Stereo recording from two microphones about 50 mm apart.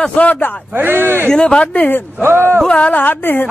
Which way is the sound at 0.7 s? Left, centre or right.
Right.